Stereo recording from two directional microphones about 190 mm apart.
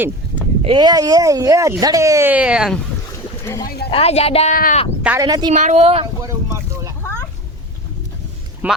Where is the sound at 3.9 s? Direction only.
30° left (ahead or behind).